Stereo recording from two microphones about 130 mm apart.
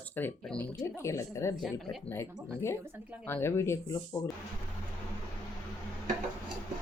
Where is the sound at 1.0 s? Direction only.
20° left (ahead or behind).